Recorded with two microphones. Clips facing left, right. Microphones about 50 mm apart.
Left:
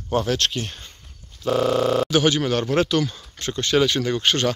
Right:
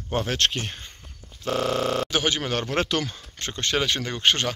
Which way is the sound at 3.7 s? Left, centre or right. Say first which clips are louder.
Left 6 dB; centre.